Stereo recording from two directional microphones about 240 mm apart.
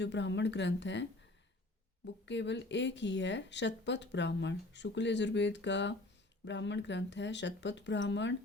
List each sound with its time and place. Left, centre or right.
0.0 s a woman's voice: left
2.2 s a woman's voice: left